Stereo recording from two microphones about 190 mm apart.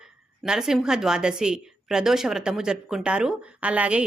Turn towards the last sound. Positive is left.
turn(degrees=-5)  # may be behind; listen again after turning